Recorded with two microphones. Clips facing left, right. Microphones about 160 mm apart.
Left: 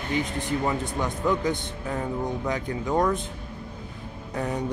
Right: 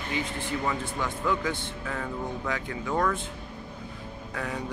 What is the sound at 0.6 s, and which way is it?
Speech, 20° left (ahead or behind).